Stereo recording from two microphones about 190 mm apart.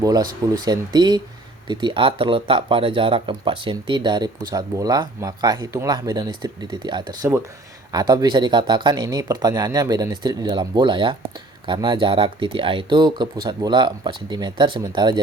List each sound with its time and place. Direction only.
0.0 s speech: 20° right (ahead or behind)